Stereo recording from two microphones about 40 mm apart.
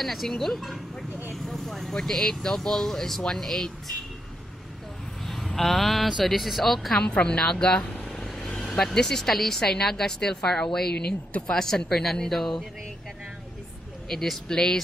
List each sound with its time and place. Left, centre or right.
0.0 s speech: centre
1.3 s vehicle: centre
2.4 s speech: centre
5.2 s a sound: centre
5.6 s speech: centre
7.1 s speech: left
11.0 s speech: left
11.5 s speech: centre
14.0 s speech: centre
14.5 s speech: centre